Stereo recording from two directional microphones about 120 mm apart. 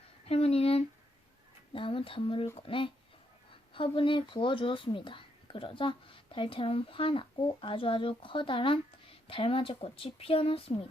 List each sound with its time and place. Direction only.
0.3 s speech: 60° left (ahead or behind)